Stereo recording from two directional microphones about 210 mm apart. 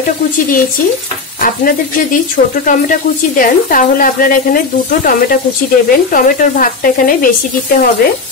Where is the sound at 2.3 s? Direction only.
40° left (ahead or behind).